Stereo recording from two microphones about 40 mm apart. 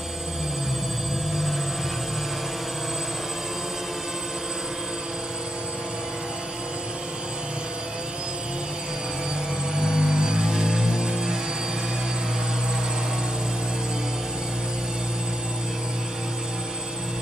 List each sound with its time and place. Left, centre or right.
9.8 s music: centre